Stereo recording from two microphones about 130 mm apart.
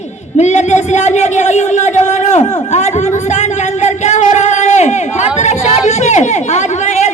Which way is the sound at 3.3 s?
60° left (ahead or behind).